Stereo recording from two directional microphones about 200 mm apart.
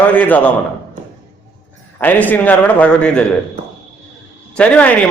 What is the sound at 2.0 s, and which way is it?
A man's voice, 10° left (ahead or behind).